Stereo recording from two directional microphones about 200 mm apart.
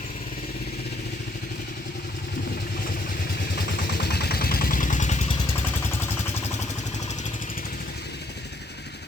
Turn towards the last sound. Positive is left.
turn(degrees=40)  # may be behind; listen again after turning